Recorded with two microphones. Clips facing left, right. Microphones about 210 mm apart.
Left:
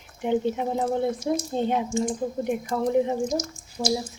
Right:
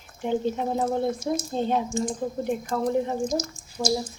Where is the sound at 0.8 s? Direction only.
25° right (ahead or behind).